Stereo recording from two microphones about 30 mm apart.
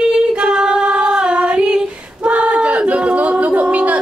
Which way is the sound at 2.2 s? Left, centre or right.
Right.